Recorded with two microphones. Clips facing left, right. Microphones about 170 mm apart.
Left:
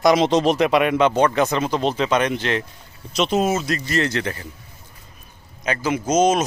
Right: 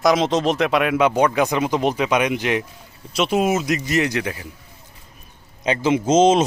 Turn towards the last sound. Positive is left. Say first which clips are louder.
# right 3 dB
turn(degrees=-25)  # may be behind; listen again after turning